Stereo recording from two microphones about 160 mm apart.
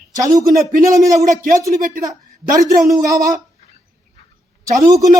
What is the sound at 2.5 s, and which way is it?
Speech, 20° right (ahead or behind).